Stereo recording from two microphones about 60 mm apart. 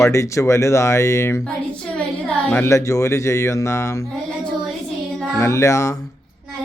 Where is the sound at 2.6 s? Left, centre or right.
Left.